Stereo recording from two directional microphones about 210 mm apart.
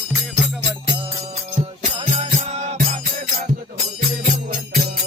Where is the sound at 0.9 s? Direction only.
25° right (ahead or behind).